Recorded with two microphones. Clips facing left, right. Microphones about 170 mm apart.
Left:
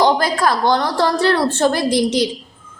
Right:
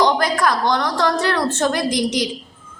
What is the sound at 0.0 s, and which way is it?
A woman's voice, 30° left (ahead or behind).